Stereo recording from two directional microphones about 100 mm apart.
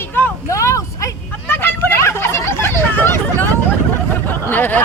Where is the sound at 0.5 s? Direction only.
30° left (ahead or behind).